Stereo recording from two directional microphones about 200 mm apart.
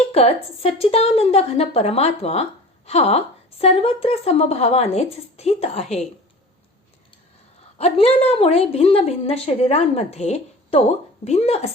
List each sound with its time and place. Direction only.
0.1 s a woman's voice: 30° left (ahead or behind)
7.8 s a woman's voice: 30° left (ahead or behind)